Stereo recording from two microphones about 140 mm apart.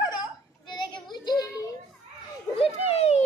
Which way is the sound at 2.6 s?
45° left (ahead or behind).